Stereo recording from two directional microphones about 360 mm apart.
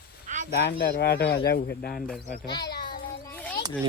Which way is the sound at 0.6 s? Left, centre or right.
Left.